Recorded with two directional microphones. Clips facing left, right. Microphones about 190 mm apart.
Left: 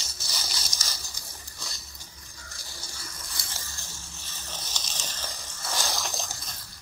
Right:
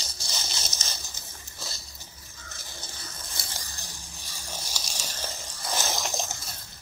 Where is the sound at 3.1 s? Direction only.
25° right (ahead or behind).